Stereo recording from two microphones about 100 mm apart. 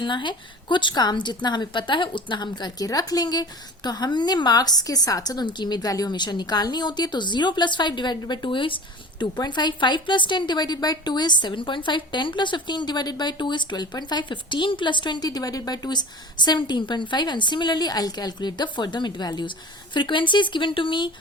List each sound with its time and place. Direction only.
0.0 s a woman's voice: 55° left (ahead or behind)